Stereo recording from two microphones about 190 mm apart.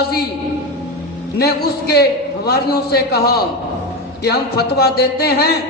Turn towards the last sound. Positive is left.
turn(degrees=55)  # may be behind; listen again after turning